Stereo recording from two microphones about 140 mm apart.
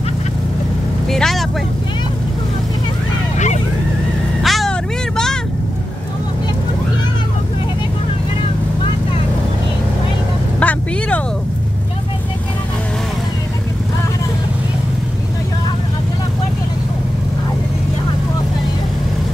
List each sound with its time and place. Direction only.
1.1 s vehicle: 5° left (ahead or behind)
4.4 s vehicle: centre (ahead or behind)
10.6 s vehicle: 10° left (ahead or behind)